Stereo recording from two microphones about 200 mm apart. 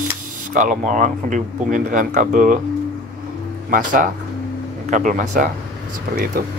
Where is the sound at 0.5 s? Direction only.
40° right (ahead or behind).